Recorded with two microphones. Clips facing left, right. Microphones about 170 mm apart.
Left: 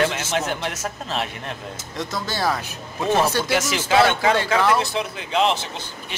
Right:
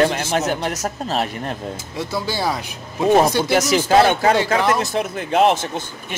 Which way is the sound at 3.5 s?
40° right (ahead or behind).